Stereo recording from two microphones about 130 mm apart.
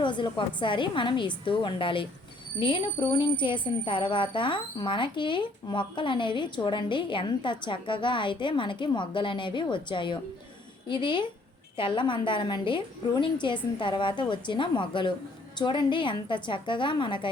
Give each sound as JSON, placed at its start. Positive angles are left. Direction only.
{"t": 0.0, "sound": "speech", "side_deg": 35}